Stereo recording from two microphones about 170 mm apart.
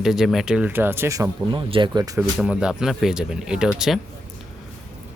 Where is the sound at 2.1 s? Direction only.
5° right (ahead or behind).